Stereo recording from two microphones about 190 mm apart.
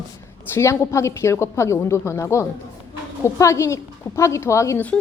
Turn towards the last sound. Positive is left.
turn(degrees=10)  # may be behind; listen again after turning